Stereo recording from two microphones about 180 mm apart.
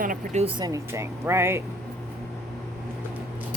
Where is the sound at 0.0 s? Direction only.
50° right (ahead or behind).